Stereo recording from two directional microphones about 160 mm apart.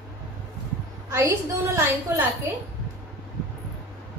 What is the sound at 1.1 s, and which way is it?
A woman's voice, 15° right (ahead or behind).